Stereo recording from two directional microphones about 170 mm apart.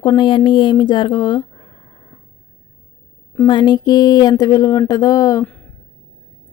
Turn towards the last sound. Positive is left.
turn(degrees=20)  # may be behind; listen again after turning